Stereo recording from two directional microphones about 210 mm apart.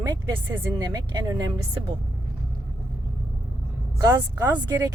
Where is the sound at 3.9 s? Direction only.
15° right (ahead or behind).